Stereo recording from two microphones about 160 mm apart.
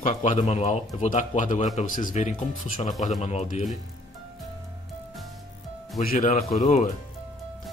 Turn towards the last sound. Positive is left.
turn(degrees=50)  # may be behind; listen again after turning